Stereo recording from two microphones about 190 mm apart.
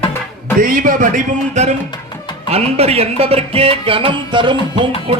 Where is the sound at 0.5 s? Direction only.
45° right (ahead or behind).